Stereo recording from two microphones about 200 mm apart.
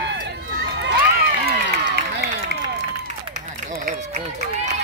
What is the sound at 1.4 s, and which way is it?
Run, 50° right (ahead or behind).